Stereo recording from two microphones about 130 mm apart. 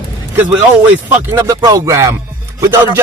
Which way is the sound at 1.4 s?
25° right (ahead or behind).